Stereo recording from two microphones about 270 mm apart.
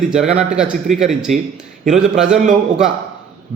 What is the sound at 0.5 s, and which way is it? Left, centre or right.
A man's voice, centre.